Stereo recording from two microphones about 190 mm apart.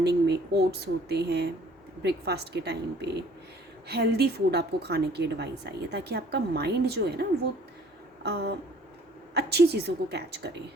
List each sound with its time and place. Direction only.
0.3 s a woman's voice: 60° right (ahead or behind)